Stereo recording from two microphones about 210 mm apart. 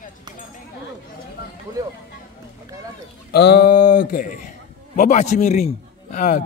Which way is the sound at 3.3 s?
50° left (ahead or behind).